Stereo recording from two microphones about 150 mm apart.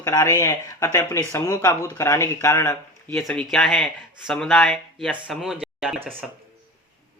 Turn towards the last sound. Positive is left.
turn(degrees=-5)  # may be behind; listen again after turning